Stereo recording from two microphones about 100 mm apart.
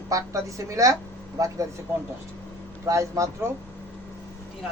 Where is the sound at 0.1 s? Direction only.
30° right (ahead or behind).